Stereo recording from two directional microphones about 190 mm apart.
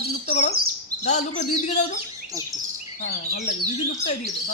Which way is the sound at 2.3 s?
15° right (ahead or behind).